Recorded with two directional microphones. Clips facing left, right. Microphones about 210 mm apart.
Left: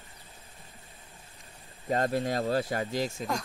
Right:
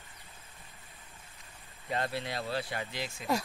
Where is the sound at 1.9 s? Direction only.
45° left (ahead or behind).